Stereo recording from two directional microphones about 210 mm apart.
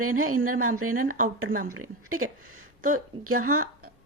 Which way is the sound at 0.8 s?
90° right.